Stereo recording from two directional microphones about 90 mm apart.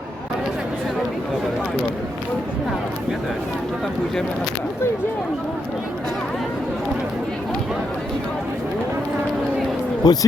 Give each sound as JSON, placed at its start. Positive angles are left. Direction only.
{"t": 10.0, "sound": "speech", "side_deg": 45}